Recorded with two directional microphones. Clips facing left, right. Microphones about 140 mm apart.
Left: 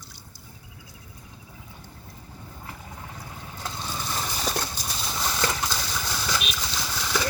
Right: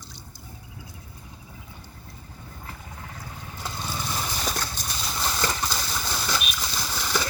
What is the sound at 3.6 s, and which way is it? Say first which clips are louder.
Vehicle: right 1 dB; 5° right (ahead or behind).